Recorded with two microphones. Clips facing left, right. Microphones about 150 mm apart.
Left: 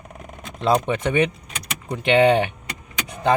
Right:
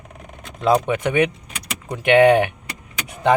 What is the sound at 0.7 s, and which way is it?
Speech, 10° right (ahead or behind).